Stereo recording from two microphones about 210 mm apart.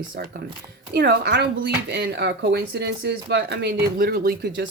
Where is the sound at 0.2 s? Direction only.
50° right (ahead or behind).